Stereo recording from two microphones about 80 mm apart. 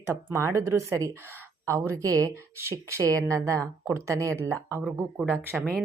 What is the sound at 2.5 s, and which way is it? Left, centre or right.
Speech, right.